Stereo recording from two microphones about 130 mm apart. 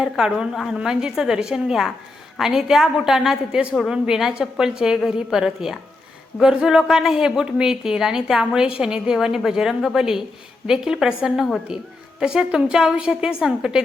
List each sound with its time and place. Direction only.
0.0 s a woman's voice: 5° right (ahead or behind)